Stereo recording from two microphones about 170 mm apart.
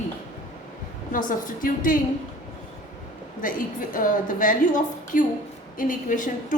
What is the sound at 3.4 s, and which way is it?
A woman's voice, 55° left (ahead or behind).